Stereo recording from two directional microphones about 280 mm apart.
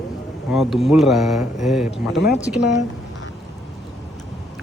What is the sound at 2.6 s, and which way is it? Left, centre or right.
Speech, left.